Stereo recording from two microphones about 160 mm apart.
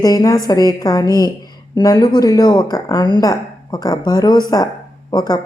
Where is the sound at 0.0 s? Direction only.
25° left (ahead or behind).